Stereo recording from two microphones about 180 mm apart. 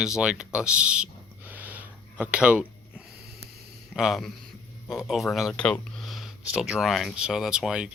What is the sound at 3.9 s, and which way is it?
Speech, centre (ahead or behind).